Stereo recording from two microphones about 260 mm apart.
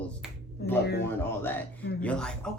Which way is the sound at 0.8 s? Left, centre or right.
Left.